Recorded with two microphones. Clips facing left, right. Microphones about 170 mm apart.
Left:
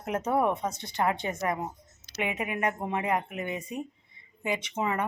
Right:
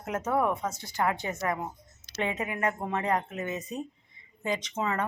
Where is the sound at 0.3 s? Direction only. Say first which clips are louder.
Left 1 dB; 20° left (ahead or behind).